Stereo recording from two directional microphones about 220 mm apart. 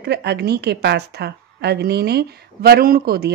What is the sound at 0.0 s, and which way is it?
A woman's voice, 50° right (ahead or behind).